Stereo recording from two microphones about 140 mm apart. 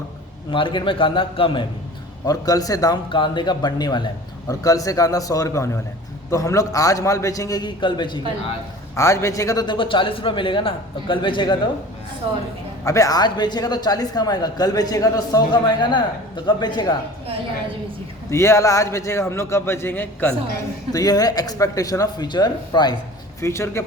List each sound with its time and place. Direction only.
0.5 s a man's voice: 35° left (ahead or behind)
2.2 s a woman's voice: 25° left (ahead or behind)
9.0 s a man's voice: 20° left (ahead or behind)
12.2 s a woman's voice: 40° right (ahead or behind)
12.8 s a woman's voice: 20° left (ahead or behind)
18.3 s a woman's voice: 20° left (ahead or behind)
20.9 s a woman's voice: 25° left (ahead or behind)